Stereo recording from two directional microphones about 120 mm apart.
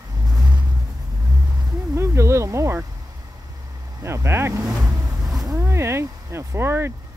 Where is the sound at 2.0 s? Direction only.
25° right (ahead or behind).